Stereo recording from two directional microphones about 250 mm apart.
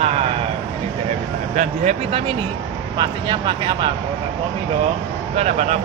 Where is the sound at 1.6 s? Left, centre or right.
Right.